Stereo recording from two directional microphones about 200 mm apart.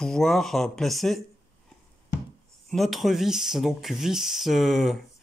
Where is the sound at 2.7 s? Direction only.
Centre (ahead or behind).